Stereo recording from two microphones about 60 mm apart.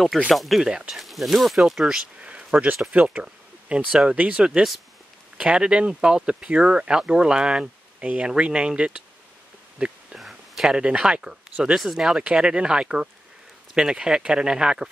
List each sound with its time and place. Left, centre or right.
0.3 s speech: centre
0.7 s speech: centre
1.0 s speech: centre
2.2 s a sound: right
2.9 s speech: right
10.1 s a sound: centre
11.7 s speech: centre